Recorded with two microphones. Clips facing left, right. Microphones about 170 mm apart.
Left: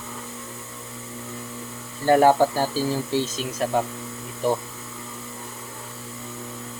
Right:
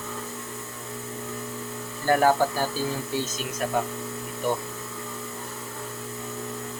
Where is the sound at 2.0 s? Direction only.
25° left (ahead or behind).